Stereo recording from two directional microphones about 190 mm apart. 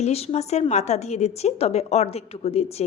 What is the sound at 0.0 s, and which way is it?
A woman's voice, 35° left (ahead or behind).